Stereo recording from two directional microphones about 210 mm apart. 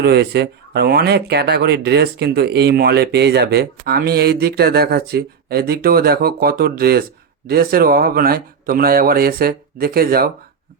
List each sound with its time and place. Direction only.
0.0 s speech: 50° right (ahead or behind)